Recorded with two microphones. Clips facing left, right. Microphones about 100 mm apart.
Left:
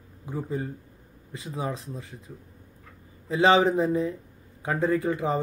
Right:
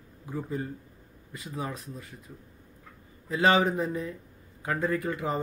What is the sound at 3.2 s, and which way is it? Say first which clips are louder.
Speech: left 3 dB; 25° left (ahead or behind).